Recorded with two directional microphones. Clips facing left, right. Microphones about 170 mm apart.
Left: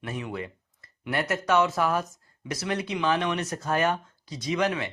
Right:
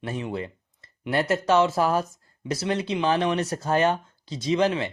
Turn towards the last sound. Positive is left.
turn(degrees=-30)  # may be behind; listen again after turning